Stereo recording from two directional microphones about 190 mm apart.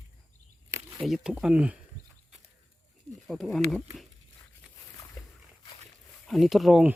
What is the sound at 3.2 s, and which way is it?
Speech, centre (ahead or behind).